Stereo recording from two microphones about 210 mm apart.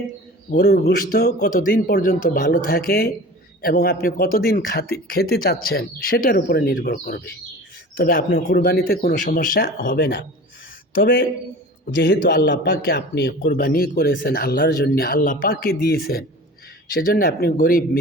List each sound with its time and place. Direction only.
0.5 s a man's voice: 50° left (ahead or behind)
11.9 s a man's voice: 55° left (ahead or behind)